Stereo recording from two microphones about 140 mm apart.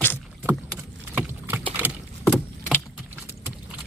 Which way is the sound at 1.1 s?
15° right (ahead or behind).